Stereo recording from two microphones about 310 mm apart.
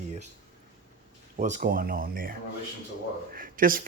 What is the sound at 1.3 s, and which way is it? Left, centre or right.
Speech, right.